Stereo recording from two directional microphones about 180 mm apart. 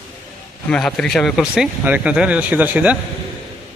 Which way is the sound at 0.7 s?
5° left (ahead or behind).